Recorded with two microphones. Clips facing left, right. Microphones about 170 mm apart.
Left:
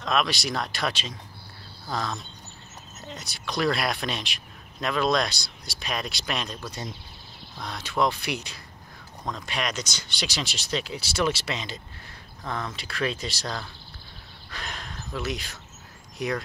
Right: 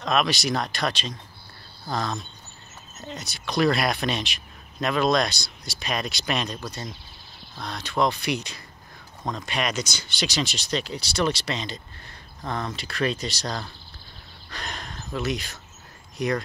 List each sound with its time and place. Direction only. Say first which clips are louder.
0.0 s speech: right 2 dB; centre (ahead or behind)
7.6 s speech: right 1 dB; 5° left (ahead or behind)